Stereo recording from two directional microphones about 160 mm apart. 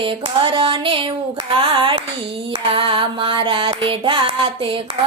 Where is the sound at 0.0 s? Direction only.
30° right (ahead or behind).